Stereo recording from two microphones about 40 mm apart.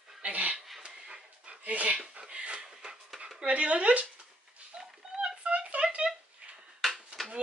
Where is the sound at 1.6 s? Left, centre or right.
Right.